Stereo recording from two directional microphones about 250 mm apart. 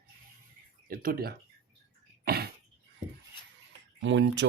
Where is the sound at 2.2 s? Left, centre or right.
Right.